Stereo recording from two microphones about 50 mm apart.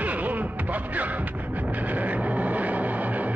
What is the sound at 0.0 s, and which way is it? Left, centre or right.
Music, right.